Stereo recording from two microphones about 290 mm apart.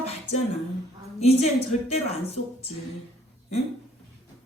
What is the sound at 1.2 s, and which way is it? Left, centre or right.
Speech, left.